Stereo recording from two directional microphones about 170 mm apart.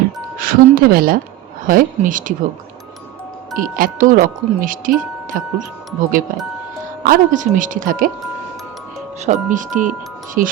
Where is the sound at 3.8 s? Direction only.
50° right (ahead or behind).